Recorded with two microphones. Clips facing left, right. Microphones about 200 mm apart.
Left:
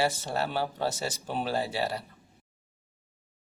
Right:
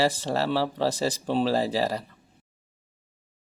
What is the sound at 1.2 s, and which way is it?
Speech, 90° right.